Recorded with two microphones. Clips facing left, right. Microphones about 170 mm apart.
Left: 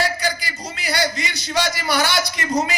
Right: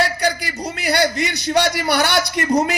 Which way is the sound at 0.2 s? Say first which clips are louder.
Right 4 dB; 60° right (ahead or behind).